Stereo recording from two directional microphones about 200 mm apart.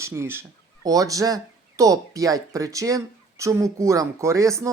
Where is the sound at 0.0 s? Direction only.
15° right (ahead or behind).